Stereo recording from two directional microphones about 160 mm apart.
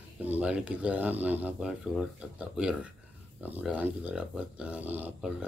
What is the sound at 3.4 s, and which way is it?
Speech, 10° right (ahead or behind).